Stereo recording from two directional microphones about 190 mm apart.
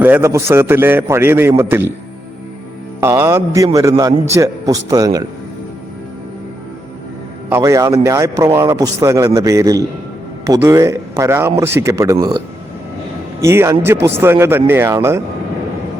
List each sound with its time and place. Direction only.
0.0 s speech: 10° right (ahead or behind)
3.0 s a man's voice: 15° right (ahead or behind)
7.5 s speech: 15° right (ahead or behind)
13.4 s speech: 15° right (ahead or behind)